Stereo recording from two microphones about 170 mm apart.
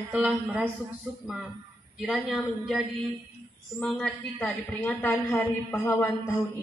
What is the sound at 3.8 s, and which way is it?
A woman's voice, 5° left (ahead or behind).